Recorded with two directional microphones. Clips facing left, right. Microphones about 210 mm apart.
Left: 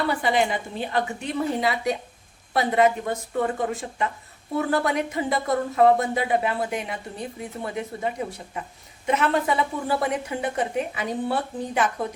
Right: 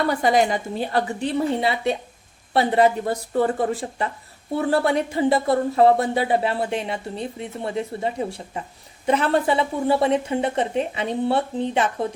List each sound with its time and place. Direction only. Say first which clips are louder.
0.1 s a woman's voice: right 4 dB; 40° right (ahead or behind); by 11.9 s 25° right (ahead or behind)